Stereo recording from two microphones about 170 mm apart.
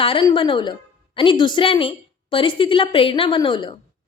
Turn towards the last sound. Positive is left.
turn(degrees=30)  # may be behind; listen again after turning